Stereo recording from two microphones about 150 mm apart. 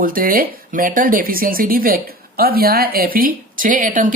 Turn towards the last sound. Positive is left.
turn(degrees=-60)  # may be behind; listen again after turning